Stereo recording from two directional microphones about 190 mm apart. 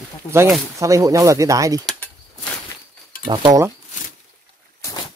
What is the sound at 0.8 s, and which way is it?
Speech, 15° right (ahead or behind).